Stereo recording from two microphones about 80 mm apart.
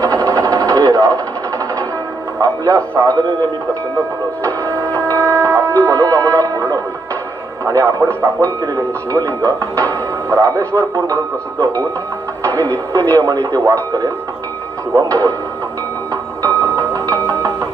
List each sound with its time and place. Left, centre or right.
0.0 s a sound: right
2.4 s music: right
4.6 s printer: left
5.0 s speech: right
16.4 s music: right